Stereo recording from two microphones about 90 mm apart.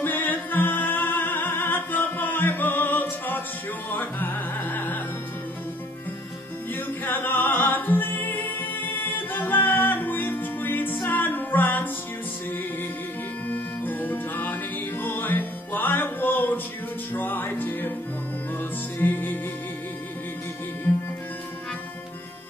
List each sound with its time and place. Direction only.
0.0 s music: 20° left (ahead or behind)
6.7 s music: 20° left (ahead or behind)
13.5 s music: 20° left (ahead or behind)
18.9 s music: 20° left (ahead or behind)